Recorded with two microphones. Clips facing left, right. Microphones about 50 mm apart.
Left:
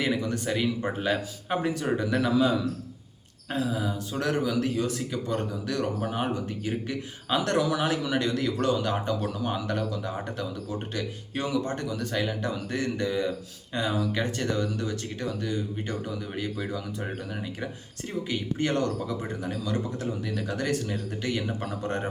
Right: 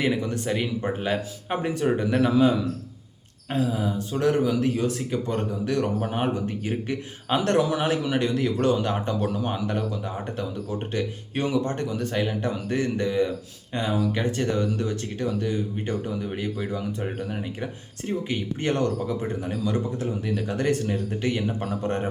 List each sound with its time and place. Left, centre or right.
0.0 s speech: right
3.7 s speech: right
18.0 s speech: right